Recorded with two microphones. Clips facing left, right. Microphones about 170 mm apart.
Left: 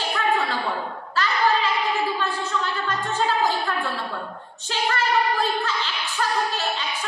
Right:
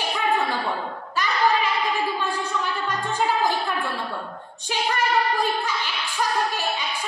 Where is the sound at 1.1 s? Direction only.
15° right (ahead or behind).